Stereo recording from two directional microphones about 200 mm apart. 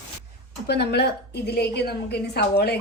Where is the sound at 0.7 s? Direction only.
55° left (ahead or behind).